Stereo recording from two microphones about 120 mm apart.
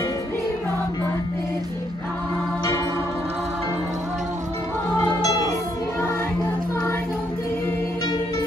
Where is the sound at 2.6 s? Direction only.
25° left (ahead or behind).